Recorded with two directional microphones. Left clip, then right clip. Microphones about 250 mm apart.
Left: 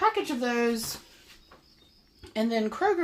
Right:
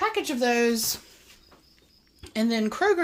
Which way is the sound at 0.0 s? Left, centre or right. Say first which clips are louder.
Right 1 dB; right.